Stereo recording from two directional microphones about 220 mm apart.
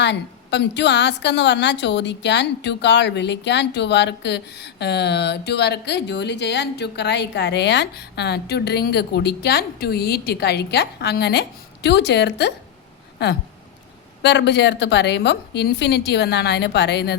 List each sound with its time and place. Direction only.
0.0 s a woman's voice: 50° left (ahead or behind)